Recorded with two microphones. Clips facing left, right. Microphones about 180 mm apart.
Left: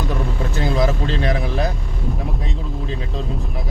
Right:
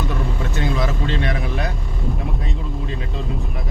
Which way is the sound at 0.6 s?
35° left (ahead or behind).